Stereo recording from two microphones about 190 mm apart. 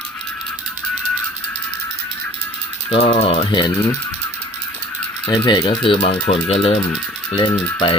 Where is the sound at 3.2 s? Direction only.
30° left (ahead or behind).